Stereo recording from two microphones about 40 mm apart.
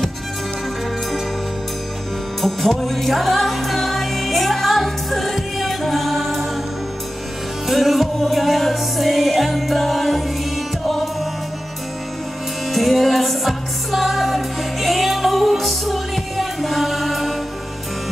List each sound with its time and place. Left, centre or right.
2.4 s music: centre
7.6 s music: centre
12.6 s music: centre